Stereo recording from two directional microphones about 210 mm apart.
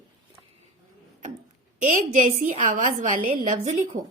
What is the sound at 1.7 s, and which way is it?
Speech, 40° right (ahead or behind).